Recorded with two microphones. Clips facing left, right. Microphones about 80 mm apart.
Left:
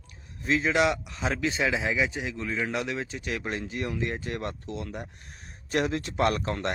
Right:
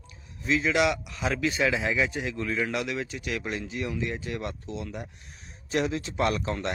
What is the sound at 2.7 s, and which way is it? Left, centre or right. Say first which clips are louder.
Speech: even; left.